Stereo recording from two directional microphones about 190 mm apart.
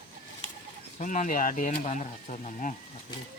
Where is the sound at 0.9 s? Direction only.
40° left (ahead or behind).